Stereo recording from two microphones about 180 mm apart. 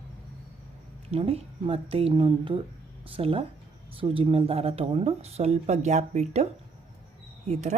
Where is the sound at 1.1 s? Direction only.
35° right (ahead or behind).